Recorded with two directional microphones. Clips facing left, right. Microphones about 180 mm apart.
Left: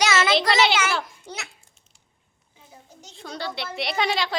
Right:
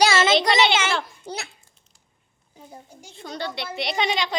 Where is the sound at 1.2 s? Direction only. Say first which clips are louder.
Right 4 dB; 35° right (ahead or behind).